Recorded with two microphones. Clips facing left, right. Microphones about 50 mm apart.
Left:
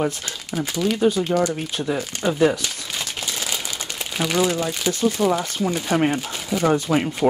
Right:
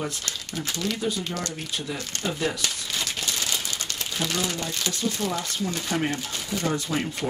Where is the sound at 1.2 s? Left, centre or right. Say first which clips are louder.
Left 11 dB; centre.